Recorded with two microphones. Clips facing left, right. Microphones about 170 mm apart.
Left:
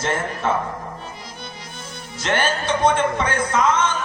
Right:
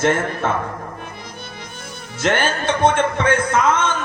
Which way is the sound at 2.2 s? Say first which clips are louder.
Right 3 dB; 55° right (ahead or behind).